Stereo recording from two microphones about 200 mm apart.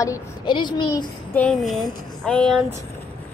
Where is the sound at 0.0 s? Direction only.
20° left (ahead or behind).